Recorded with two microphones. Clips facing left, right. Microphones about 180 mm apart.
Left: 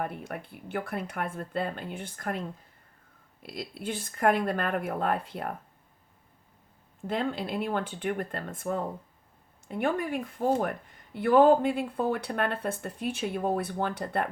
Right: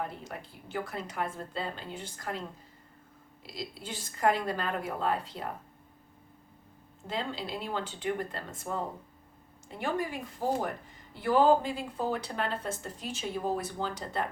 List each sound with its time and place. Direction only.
0.0 s speech: 60° left (ahead or behind)
3.4 s speech: 55° left (ahead or behind)
7.1 s speech: 55° left (ahead or behind)